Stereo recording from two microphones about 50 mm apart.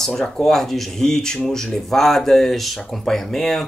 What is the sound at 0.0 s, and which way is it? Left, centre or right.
Speech, centre.